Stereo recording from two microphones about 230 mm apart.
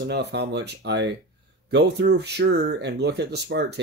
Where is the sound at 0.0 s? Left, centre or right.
Right.